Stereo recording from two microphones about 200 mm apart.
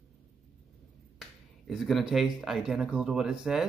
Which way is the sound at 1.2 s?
Centre (ahead or behind).